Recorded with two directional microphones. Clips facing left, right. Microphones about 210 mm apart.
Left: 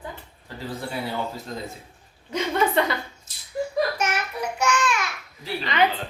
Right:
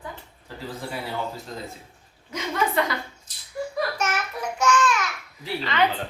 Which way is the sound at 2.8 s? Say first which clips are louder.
Even; 25° left (ahead or behind).